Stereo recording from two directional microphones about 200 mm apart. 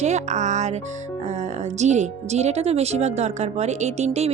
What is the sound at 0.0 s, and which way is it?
Speech, 35° right (ahead or behind).